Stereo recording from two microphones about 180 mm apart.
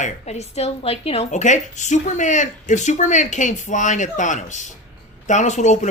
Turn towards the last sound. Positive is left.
turn(degrees=40)  # may be behind; listen again after turning